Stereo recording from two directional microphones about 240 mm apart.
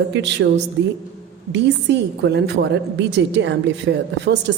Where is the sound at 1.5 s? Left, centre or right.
Right.